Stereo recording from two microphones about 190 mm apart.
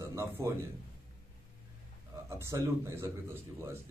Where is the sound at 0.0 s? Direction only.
15° right (ahead or behind).